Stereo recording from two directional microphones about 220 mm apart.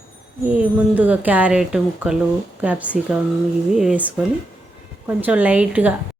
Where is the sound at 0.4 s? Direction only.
5° right (ahead or behind).